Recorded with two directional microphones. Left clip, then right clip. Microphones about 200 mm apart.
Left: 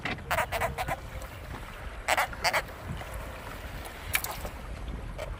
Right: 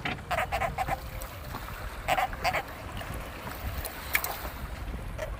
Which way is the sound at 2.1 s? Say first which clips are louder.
Left 1 dB; 25° left (ahead or behind).